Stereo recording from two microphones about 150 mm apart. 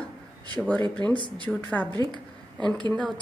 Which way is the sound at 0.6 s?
10° left (ahead or behind).